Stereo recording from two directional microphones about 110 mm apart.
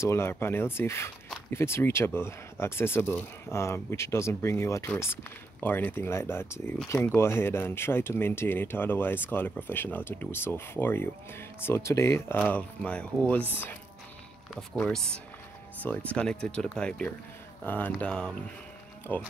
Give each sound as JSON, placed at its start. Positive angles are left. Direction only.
{"t": 0.0, "sound": "speech", "side_deg": 25}
{"t": 12.4, "sound": "speech", "side_deg": 15}
{"t": 14.5, "sound": "speech", "side_deg": 5}